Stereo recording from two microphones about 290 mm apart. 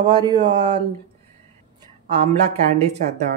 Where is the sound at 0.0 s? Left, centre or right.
Centre.